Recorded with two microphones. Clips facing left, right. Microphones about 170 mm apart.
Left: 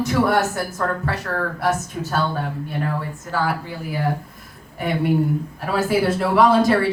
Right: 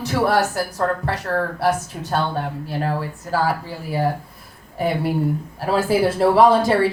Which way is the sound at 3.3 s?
35° right (ahead or behind).